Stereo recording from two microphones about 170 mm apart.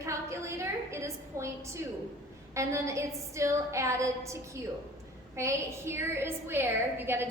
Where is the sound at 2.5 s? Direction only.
15° right (ahead or behind).